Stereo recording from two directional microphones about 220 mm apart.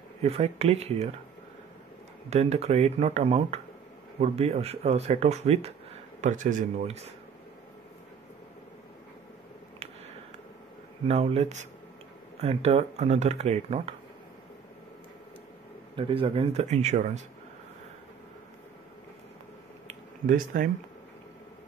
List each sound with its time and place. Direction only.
0.2 s speech: 30° right (ahead or behind)
2.2 s speech: 30° right (ahead or behind)
11.1 s speech: 25° right (ahead or behind)
16.0 s speech: 25° right (ahead or behind)
19.9 s a sound: 40° right (ahead or behind)